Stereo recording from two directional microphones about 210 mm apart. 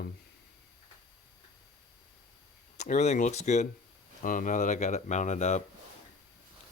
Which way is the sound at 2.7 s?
35° left (ahead or behind).